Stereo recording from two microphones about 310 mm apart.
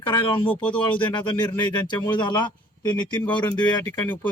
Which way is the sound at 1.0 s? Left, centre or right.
Centre.